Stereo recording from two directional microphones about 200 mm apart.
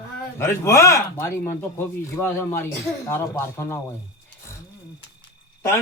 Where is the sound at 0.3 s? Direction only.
15° left (ahead or behind).